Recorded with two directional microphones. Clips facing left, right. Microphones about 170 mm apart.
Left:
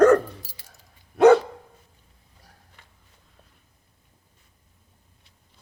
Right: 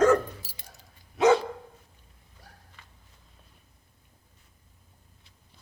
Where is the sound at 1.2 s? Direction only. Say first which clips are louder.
Left 7 dB; 55° left (ahead or behind).